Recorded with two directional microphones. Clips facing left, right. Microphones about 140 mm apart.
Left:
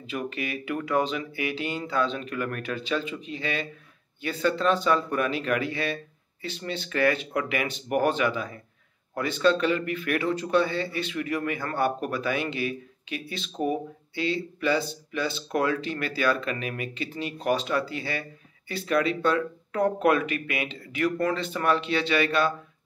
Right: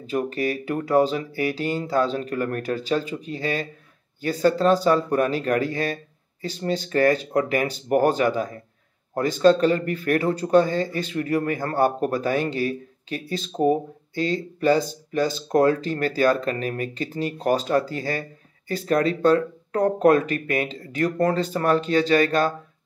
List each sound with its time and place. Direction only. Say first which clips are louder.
0.0 s speech: right 7 dB; 40° right (ahead or behind)